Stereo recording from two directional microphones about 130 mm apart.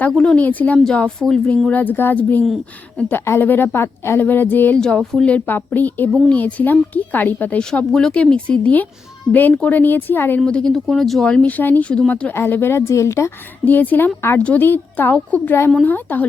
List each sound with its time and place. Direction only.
0.1 s speech: 5° left (ahead or behind)
10.4 s speech: 5° left (ahead or behind)